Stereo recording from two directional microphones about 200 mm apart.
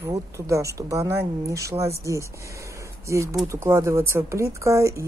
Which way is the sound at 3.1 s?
15° right (ahead or behind).